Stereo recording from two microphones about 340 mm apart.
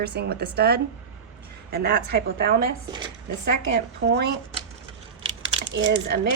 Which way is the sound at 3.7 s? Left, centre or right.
Right.